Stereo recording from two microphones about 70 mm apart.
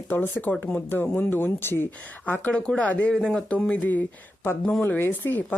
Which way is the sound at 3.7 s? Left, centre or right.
Left.